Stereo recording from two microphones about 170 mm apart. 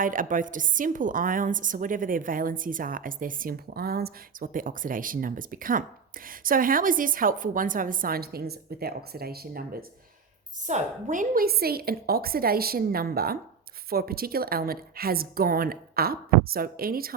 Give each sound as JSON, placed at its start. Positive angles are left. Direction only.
{"t": 0.0, "sound": "a woman's voice", "side_deg": -50}
{"t": 10.6, "sound": "a woman's voice", "side_deg": -45}